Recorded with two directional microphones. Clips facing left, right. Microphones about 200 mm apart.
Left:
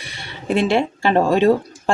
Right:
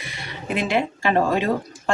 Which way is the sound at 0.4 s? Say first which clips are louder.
Left 5 dB; 30° left (ahead or behind).